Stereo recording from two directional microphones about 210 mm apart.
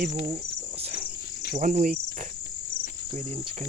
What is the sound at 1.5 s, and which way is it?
Speech, 40° right (ahead or behind).